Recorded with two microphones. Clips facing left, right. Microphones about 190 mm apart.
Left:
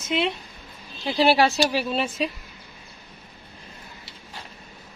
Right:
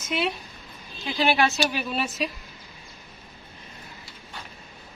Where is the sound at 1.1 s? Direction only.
35° left (ahead or behind).